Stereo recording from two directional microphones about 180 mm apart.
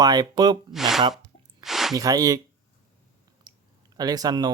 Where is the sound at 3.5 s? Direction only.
25° right (ahead or behind).